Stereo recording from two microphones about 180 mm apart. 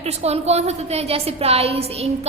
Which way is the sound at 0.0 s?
35° right (ahead or behind).